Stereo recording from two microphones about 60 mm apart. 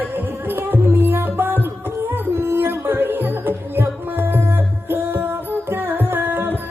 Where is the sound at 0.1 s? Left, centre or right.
Right.